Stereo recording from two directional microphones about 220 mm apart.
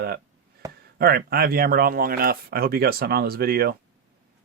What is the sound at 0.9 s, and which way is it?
Speech, 45° right (ahead or behind).